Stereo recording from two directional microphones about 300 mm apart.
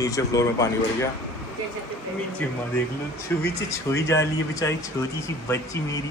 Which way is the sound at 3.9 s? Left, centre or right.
Centre.